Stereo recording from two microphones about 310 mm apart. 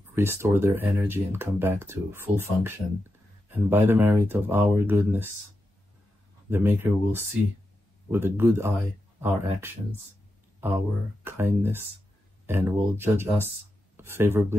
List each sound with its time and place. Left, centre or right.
0.1 s speech: centre
6.5 s speech: centre
11.2 s speech: centre